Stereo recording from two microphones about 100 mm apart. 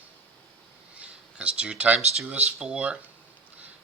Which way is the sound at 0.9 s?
10° right (ahead or behind).